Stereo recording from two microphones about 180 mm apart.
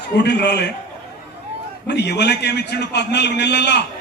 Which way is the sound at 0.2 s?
70° left (ahead or behind).